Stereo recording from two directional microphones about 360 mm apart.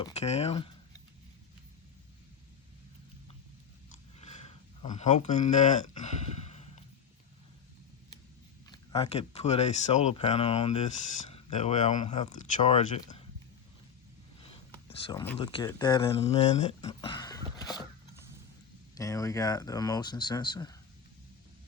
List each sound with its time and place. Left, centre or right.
0.0 s speech: centre
4.2 s a sound: centre
8.7 s speech: centre
14.4 s speech: centre
18.9 s speech: centre